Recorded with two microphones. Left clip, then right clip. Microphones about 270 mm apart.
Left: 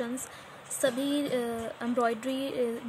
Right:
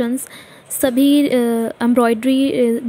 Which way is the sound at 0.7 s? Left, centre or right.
Right.